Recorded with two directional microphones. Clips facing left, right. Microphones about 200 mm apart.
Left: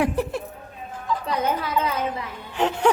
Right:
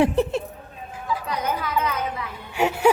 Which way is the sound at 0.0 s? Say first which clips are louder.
Right 4 dB; 25° right (ahead or behind).